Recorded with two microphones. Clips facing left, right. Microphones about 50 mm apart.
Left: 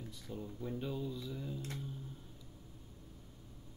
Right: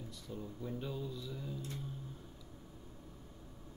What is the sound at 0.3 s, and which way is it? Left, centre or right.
Speech, centre.